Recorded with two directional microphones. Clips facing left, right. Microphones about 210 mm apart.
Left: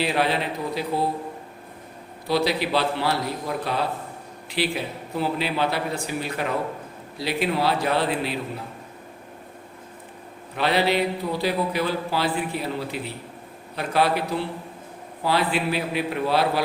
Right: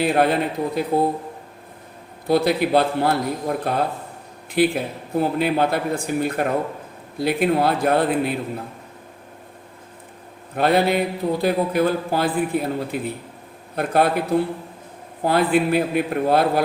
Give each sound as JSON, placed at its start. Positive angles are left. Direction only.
{"t": 0.0, "sound": "a man's voice", "side_deg": -50}
{"t": 2.2, "sound": "a man's voice", "side_deg": -50}
{"t": 10.5, "sound": "a man's voice", "side_deg": -50}